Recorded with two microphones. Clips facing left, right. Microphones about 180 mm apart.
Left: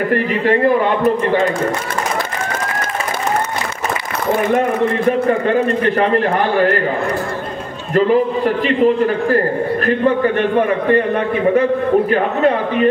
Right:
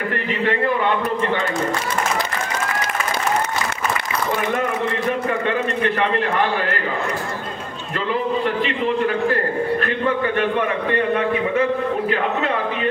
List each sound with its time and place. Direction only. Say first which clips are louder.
5.5 s a man's voice: left 6 dB; 40° left (ahead or behind)
8.5 s a man's voice: left 7 dB; 40° left (ahead or behind)